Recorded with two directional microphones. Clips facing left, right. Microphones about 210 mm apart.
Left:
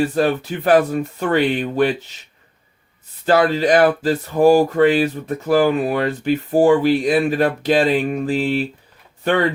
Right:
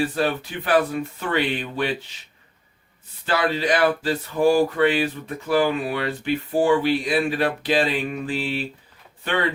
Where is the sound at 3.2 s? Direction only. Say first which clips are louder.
Left 7 dB; 45° left (ahead or behind).